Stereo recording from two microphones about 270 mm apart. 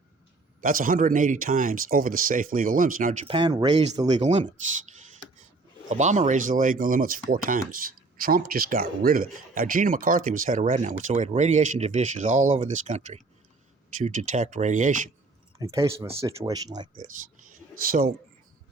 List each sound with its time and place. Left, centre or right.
0.6 s speech: right
5.9 s speech: right
15.5 s speech: centre